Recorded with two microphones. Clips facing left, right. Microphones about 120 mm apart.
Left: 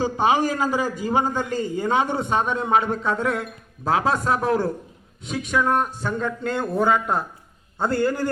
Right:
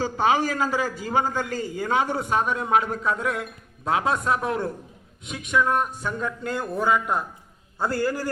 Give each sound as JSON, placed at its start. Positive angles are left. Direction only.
{"t": 0.0, "sound": "a man's voice", "side_deg": 15}